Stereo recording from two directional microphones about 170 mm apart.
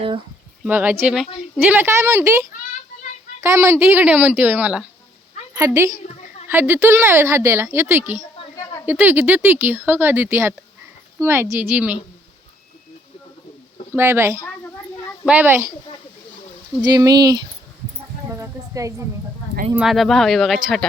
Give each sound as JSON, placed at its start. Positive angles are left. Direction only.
{"t": 0.6, "sound": "a woman's voice", "side_deg": -10}
{"t": 3.4, "sound": "a woman's voice", "side_deg": -15}
{"t": 13.9, "sound": "a woman's voice", "side_deg": -15}
{"t": 16.8, "sound": "speech", "side_deg": -25}
{"t": 18.3, "sound": "a sound", "side_deg": -15}
{"t": 19.7, "sound": "speech", "side_deg": 0}